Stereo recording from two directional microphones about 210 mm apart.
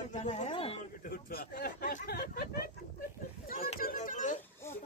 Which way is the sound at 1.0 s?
45° left (ahead or behind).